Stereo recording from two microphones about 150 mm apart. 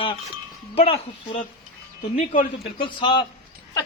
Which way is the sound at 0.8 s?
45° left (ahead or behind).